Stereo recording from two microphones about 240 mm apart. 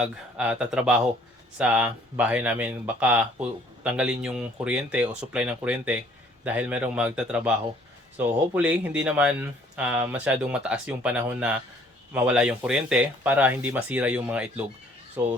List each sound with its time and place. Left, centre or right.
0.0 s speech: centre